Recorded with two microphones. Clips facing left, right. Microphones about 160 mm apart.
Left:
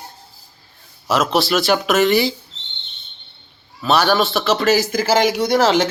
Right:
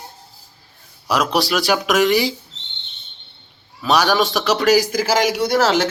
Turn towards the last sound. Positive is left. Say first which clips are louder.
# left 1 dB
turn(degrees=-5)  # may be behind; listen again after turning